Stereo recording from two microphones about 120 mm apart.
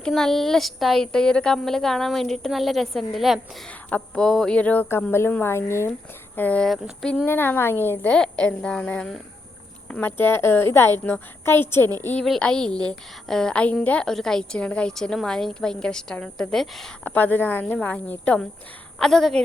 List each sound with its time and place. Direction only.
0.0 s a woman's voice: 5° left (ahead or behind)
3.7 s speech: 10° left (ahead or behind)
6.7 s a woman's voice: 5° left (ahead or behind)
7.3 s speech: 20° left (ahead or behind)
9.9 s a woman's voice: 15° left (ahead or behind)
12.2 s a woman's voice: 5° left (ahead or behind)
17.0 s a woman's voice: 15° left (ahead or behind)